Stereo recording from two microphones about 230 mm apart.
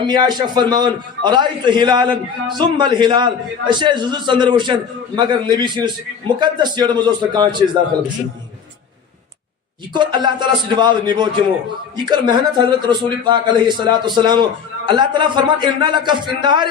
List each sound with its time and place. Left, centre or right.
0.0 s a man's voice: centre
9.9 s a man's voice: centre